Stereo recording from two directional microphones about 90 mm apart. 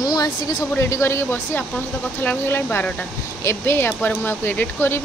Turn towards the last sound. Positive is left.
turn(degrees=25)  # may be behind; listen again after turning